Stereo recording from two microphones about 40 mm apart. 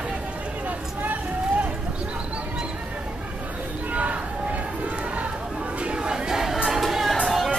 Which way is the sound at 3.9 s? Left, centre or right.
Right.